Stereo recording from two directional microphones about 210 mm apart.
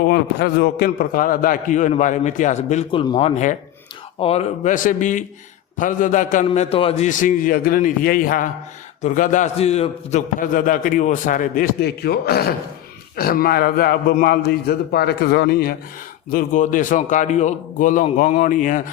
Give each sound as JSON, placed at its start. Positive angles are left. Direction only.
{"t": 0.1, "sound": "a man's voice", "side_deg": 50}
{"t": 0.9, "sound": "a man's voice", "side_deg": 40}